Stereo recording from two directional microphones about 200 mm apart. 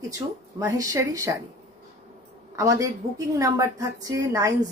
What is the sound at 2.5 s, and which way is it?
A woman's voice, 15° right (ahead or behind).